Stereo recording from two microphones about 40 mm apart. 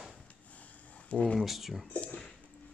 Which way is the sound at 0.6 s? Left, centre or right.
Left.